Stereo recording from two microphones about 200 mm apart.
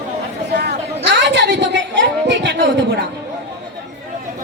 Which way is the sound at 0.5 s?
60° right (ahead or behind).